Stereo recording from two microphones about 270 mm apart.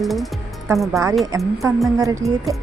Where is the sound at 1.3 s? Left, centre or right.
Centre.